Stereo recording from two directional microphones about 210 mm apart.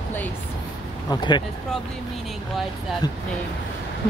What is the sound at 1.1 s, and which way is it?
Speech, 20° left (ahead or behind).